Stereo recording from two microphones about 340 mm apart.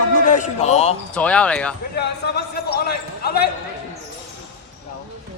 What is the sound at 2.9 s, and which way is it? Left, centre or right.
Basketball bounce, left.